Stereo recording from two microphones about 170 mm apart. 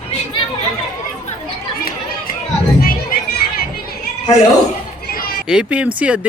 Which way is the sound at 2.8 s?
60° left (ahead or behind).